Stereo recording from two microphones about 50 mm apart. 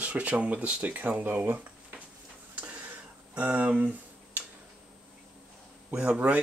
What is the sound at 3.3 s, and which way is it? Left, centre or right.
Speech, right.